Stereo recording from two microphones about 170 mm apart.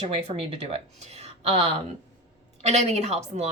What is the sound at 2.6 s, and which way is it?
Speech, 40° right (ahead or behind).